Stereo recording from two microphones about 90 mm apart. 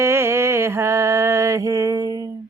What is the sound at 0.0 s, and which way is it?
Mantra, 30° right (ahead or behind).